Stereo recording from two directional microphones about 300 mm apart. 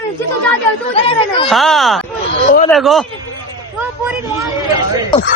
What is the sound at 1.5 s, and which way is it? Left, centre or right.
A woman's voice, centre.